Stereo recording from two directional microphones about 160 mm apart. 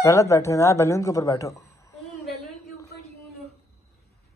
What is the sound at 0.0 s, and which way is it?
Speech, 20° left (ahead or behind).